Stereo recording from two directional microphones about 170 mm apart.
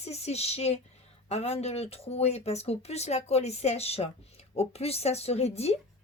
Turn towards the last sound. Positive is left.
turn(degrees=35)  # may be behind; listen again after turning